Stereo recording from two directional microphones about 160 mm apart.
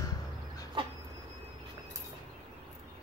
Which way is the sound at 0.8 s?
30° right (ahead or behind).